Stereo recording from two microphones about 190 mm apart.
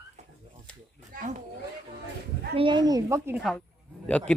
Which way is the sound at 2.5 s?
25° right (ahead or behind).